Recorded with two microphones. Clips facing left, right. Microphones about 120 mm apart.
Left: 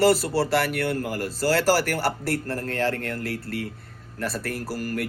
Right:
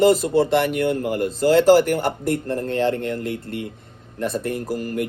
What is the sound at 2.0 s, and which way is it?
Speech, 20° right (ahead or behind).